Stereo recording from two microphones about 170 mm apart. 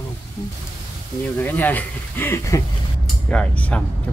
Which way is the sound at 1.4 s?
10° left (ahead or behind).